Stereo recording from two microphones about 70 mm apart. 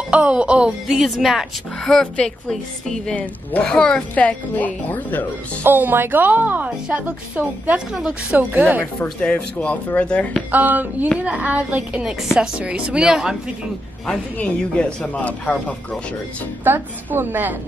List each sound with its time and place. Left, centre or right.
0.1 s speech: centre
1.9 s a woman's voice: centre; by 5.2 s left
5.6 s a woman's voice: right; by 8.4 s centre
8.4 s a woman's voice: right
9.2 s a woman's voice: centre
10.5 s a woman's voice: right
12.0 s speech: centre
14.0 s speech: centre
16.6 s a woman's voice: right